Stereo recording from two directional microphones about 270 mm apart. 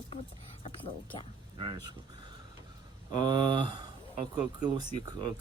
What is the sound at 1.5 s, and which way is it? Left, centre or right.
Speech, centre.